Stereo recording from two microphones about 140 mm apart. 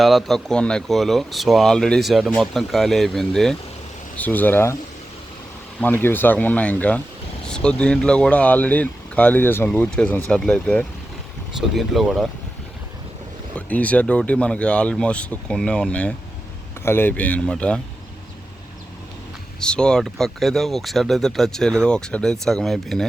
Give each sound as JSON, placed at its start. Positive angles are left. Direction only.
{"t": 0.0, "sound": "speech", "side_deg": 0}
{"t": 4.2, "sound": "speech", "side_deg": 10}
{"t": 5.8, "sound": "speech", "side_deg": 15}
{"t": 13.6, "sound": "speech", "side_deg": 10}
{"t": 19.5, "sound": "speech", "side_deg": 5}